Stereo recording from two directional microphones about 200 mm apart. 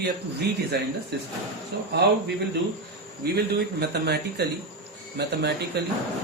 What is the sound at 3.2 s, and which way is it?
Speech, 55° right (ahead or behind).